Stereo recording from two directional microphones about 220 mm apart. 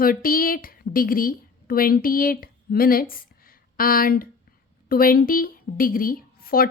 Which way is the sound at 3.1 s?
40° left (ahead or behind).